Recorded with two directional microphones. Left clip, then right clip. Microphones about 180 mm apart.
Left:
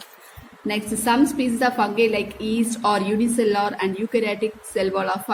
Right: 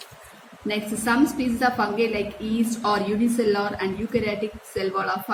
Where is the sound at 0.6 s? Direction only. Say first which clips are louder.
Left 3 dB; 25° left (ahead or behind).